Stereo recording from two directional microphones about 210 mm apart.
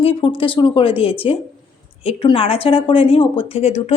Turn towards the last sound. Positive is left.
turn(degrees=30)  # may be behind; listen again after turning